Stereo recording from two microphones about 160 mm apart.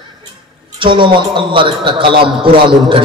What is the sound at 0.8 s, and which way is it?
A man's voice, 30° right (ahead or behind).